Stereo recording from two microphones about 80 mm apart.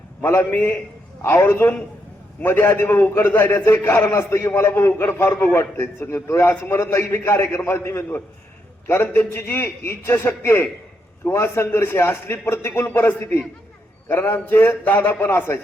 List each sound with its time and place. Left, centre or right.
0.2 s a man's voice: left